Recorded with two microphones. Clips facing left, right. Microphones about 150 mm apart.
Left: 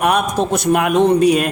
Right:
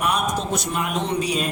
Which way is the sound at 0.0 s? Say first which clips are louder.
Left 7 dB; 65° left (ahead or behind).